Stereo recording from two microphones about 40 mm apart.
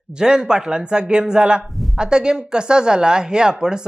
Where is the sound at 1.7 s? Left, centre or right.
Centre.